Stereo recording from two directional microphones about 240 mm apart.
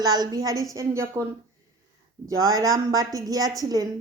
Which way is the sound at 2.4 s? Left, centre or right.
Centre.